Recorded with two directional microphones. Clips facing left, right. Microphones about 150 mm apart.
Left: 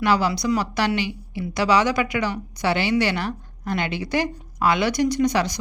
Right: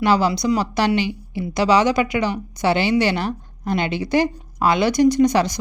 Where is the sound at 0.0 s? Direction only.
25° right (ahead or behind).